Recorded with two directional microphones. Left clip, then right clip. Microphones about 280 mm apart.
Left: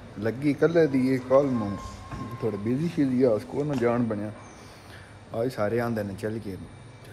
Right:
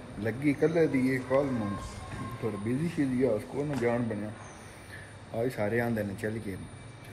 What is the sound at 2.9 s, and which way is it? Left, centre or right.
Speech, centre.